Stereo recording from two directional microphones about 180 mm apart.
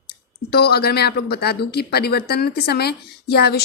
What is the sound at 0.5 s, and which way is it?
Speech, 60° left (ahead or behind).